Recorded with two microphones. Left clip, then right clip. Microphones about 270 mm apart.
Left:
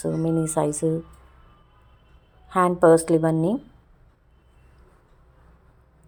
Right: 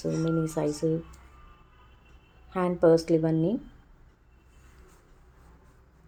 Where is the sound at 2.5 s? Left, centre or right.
Left.